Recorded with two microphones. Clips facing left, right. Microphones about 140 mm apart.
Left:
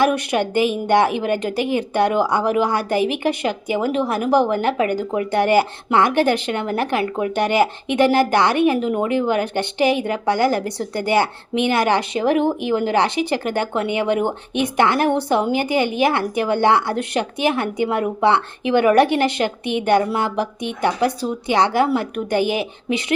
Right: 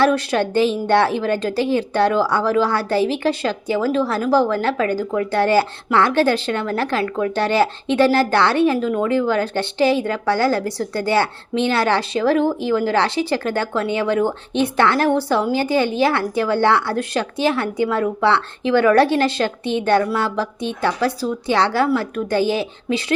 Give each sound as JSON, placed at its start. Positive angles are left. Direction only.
{"t": 0.0, "sound": "a woman's voice", "side_deg": 20}